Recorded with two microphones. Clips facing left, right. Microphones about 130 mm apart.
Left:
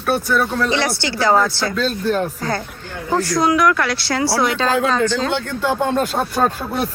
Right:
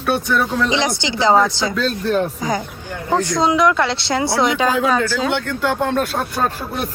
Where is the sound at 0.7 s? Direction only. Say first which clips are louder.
Even; 20° right (ahead or behind).